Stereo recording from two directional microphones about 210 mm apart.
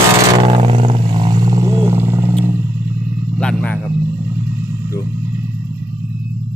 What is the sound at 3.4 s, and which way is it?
Vehicle, 5° left (ahead or behind).